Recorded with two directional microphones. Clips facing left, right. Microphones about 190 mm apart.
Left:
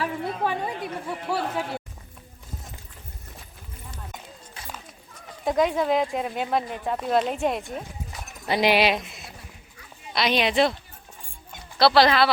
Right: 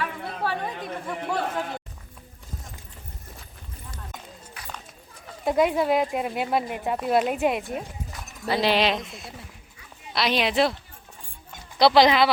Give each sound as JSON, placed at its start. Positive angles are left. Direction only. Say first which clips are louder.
{"t": 0.4, "sound": "a woman's voice", "louder": "right 1 dB", "side_deg": 10}
{"t": 5.5, "sound": "speech", "louder": "right 1 dB", "side_deg": -5}
{"t": 8.4, "sound": "speech", "louder": "left 1 dB", "side_deg": 15}
{"t": 11.8, "sound": "speech", "louder": "right 1 dB", "side_deg": -15}